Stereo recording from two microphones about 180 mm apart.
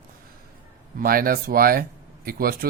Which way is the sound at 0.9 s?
55° right (ahead or behind).